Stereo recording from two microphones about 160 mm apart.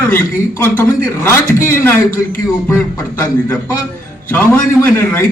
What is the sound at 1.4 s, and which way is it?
Speech, 60° left (ahead or behind).